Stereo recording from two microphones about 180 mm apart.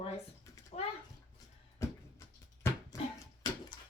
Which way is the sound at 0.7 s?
35° left (ahead or behind).